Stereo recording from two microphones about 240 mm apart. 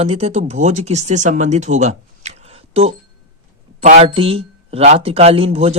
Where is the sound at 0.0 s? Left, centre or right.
Right.